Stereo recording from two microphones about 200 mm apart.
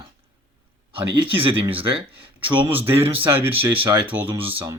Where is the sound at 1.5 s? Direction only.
10° right (ahead or behind).